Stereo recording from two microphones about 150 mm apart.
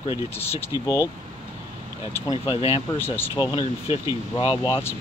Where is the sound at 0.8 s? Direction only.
20° left (ahead or behind).